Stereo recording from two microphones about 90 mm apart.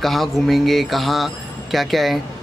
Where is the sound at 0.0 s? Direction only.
Centre (ahead or behind).